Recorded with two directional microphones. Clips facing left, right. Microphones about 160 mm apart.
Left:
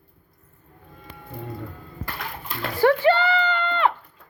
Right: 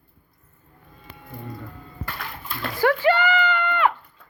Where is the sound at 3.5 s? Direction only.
25° left (ahead or behind).